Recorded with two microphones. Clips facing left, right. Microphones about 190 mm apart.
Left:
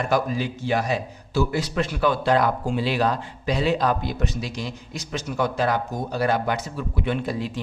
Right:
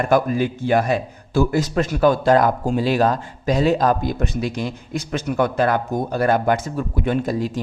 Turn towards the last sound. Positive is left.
turn(degrees=-45)  # may be behind; listen again after turning